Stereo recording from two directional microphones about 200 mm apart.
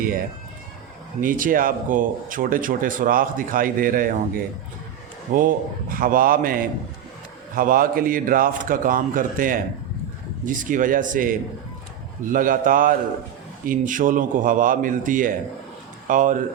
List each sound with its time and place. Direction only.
1.2 s speech: 45° right (ahead or behind)
5.3 s a man's voice: 45° right (ahead or behind)